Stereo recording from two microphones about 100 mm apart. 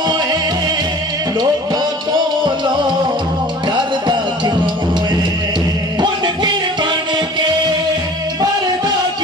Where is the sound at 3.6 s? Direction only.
50° right (ahead or behind).